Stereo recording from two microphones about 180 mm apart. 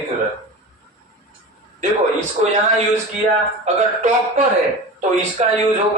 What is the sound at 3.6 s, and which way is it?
Speech, 40° right (ahead or behind).